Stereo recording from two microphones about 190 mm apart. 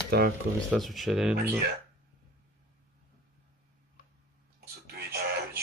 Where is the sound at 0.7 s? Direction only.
Centre (ahead or behind).